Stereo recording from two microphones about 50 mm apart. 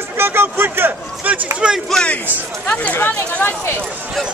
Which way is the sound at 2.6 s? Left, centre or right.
Left.